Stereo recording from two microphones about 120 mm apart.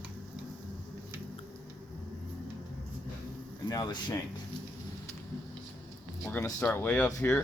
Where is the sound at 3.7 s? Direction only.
35° left (ahead or behind).